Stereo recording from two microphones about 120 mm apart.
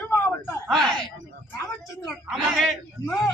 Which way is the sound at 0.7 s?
5° left (ahead or behind).